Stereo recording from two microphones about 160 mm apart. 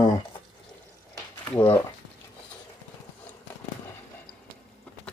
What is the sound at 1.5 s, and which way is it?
Speech, 10° left (ahead or behind).